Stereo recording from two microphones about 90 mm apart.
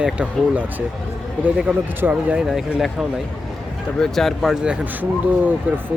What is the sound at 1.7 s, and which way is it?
Speech, 15° right (ahead or behind).